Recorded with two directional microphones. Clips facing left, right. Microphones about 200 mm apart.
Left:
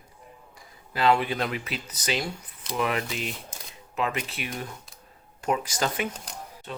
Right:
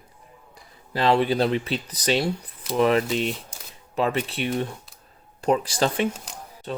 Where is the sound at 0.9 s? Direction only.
35° right (ahead or behind).